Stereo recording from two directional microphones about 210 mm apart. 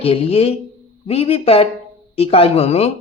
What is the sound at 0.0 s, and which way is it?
Speech, 30° left (ahead or behind).